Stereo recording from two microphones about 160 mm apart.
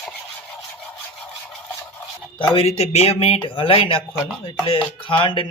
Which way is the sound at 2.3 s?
35° left (ahead or behind).